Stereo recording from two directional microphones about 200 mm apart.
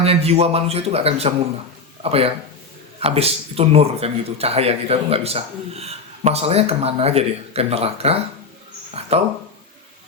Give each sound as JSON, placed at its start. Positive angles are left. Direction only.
{"t": 0.0, "sound": "a man's voice", "side_deg": -30}